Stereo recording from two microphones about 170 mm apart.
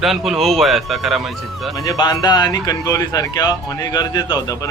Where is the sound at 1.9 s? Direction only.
25° left (ahead or behind).